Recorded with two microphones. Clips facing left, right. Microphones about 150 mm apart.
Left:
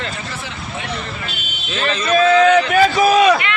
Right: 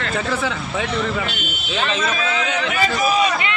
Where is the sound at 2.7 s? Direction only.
90° left.